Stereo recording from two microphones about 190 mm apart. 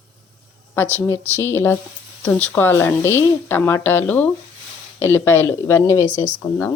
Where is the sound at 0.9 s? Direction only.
15° left (ahead or behind).